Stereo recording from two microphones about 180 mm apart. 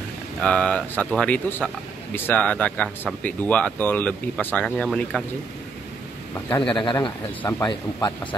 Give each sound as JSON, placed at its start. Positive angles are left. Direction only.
{"t": 0.4, "sound": "speech", "side_deg": 5}
{"t": 6.7, "sound": "speech", "side_deg": 25}